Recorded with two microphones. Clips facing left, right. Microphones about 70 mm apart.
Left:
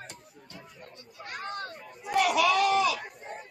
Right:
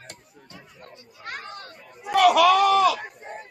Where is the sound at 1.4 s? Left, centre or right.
Left.